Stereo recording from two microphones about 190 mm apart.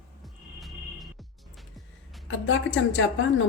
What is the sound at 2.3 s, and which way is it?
Speech, 90° left.